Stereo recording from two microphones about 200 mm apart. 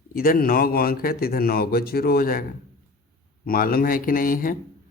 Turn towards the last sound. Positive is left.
turn(degrees=45)  # may be behind; listen again after turning